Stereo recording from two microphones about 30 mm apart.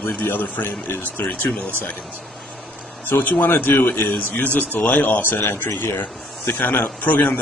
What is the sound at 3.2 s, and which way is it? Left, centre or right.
Speech, left.